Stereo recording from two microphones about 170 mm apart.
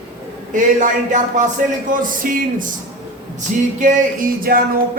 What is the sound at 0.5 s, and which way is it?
Speech, 50° right (ahead or behind).